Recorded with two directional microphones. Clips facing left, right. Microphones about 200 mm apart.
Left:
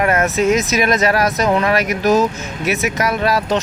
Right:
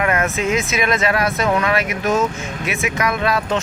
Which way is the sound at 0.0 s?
40° left (ahead or behind).